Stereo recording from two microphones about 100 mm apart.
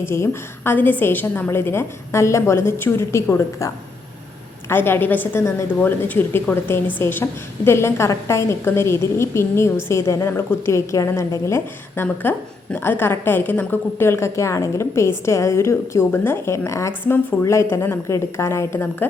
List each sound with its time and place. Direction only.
0.0 s a woman's voice: 25° left (ahead or behind)
4.7 s a woman's voice: 20° left (ahead or behind)